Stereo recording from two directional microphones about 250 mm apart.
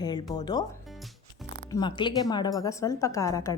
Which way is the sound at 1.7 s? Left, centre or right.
Centre.